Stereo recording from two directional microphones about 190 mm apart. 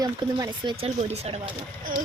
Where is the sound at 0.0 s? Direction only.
20° right (ahead or behind).